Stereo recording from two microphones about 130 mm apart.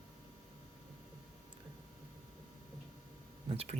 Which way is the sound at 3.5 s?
50° right (ahead or behind).